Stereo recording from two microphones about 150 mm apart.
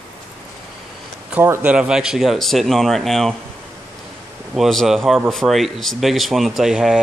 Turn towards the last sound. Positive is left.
turn(degrees=-5)  # may be behind; listen again after turning